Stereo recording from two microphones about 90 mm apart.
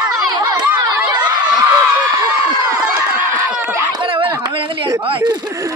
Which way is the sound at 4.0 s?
70° right (ahead or behind).